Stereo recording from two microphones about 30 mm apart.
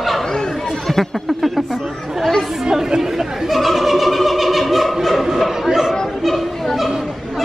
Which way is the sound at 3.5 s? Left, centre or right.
Centre.